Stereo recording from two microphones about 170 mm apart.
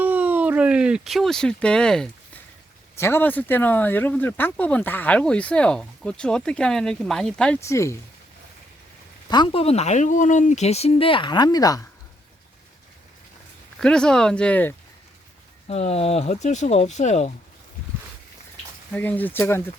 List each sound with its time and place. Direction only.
0.0 s speech: 10° right (ahead or behind)
7.6 s speech: 15° left (ahead or behind)
9.3 s speech: 30° left (ahead or behind)
13.7 s speech: 5° left (ahead or behind)
15.6 s speech: 35° left (ahead or behind)
18.9 s speech: 10° left (ahead or behind)